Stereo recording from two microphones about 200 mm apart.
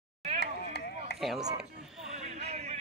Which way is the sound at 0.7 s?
55° left (ahead or behind).